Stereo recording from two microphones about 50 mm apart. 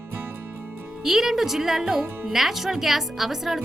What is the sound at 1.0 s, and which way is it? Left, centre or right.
Speech, centre.